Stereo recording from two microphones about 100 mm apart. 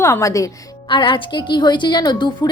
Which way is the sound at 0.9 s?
55° left (ahead or behind).